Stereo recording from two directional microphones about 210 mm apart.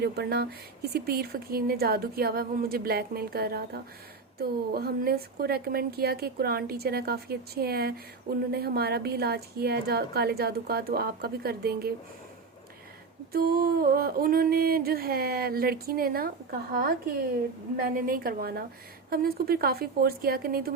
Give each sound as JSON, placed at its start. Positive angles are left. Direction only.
{"t": 0.0, "sound": "a woman's voice", "side_deg": -50}
{"t": 13.3, "sound": "a woman's voice", "side_deg": -45}
{"t": 17.7, "sound": "a woman's voice", "side_deg": -45}